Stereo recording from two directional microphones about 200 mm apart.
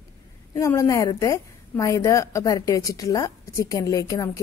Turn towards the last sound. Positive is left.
turn(degrees=15)  # may be behind; listen again after turning